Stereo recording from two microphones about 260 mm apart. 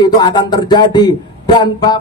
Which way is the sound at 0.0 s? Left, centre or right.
Centre.